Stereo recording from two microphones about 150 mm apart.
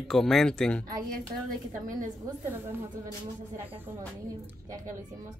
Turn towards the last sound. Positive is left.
turn(degrees=-15)  # may be behind; listen again after turning